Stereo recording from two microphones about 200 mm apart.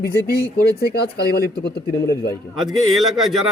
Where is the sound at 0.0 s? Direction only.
50° left (ahead or behind).